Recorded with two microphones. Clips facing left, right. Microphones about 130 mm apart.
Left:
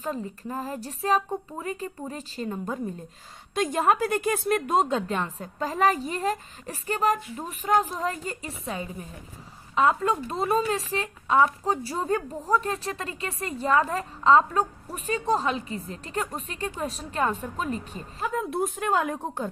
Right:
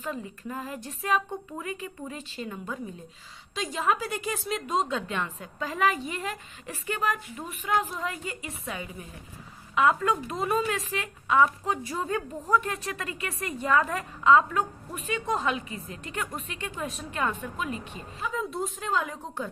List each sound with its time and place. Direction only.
0.0 s a woman's voice: 35° left (ahead or behind)
3.5 s a woman's voice: 50° left (ahead or behind)
18.3 s speech: 60° left (ahead or behind)